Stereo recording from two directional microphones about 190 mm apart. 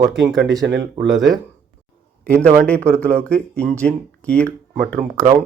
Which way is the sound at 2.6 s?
5° left (ahead or behind).